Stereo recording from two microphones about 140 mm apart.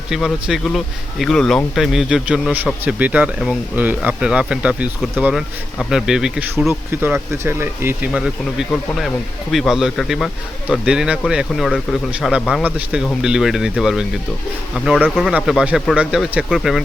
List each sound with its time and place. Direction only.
0.1 s a man's voice: centre (ahead or behind)
6.9 s speech: 15° right (ahead or behind)
8.1 s a man's voice: 5° right (ahead or behind)